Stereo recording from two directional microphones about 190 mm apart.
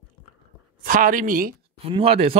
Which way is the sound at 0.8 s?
45° right (ahead or behind).